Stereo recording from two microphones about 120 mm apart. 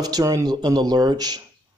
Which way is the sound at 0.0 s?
30° right (ahead or behind).